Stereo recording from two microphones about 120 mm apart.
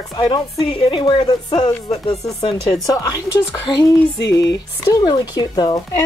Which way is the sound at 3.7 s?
40° left (ahead or behind).